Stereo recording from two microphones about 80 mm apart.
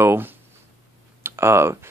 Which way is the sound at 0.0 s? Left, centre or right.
Right.